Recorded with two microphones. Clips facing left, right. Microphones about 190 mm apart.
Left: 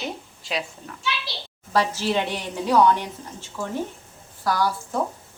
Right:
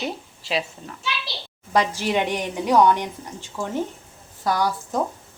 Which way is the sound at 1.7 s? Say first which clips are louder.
Right 1 dB; 15° right (ahead or behind).